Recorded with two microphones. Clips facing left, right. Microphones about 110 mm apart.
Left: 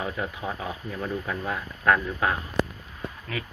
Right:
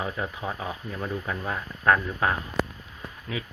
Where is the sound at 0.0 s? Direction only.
20° right (ahead or behind).